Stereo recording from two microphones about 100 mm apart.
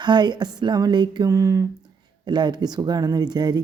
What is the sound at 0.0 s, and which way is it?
Speech, 45° right (ahead or behind).